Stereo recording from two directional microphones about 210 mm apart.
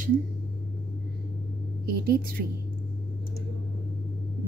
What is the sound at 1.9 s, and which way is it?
Speech, 45° right (ahead or behind).